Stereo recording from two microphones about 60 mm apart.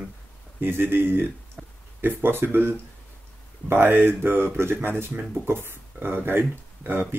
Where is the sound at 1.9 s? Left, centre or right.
Right.